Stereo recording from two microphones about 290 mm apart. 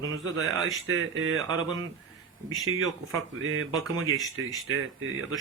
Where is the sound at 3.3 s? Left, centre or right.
Right.